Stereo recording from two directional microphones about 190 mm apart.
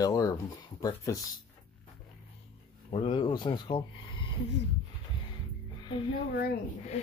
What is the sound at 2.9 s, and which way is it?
Speech, 30° left (ahead or behind).